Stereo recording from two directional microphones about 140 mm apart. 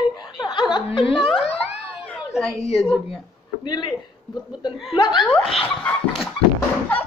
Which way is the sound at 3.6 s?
30° left (ahead or behind).